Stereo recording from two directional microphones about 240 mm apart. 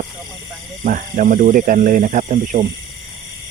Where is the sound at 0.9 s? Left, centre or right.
Right.